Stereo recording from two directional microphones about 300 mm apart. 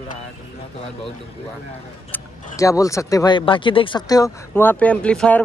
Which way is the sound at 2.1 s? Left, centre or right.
Centre.